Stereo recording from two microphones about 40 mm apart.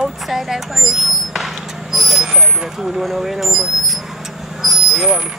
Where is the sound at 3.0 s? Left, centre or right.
Centre.